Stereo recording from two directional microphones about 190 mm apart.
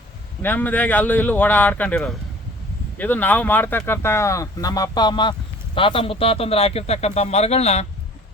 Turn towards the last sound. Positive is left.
turn(degrees=35)  # may be behind; listen again after turning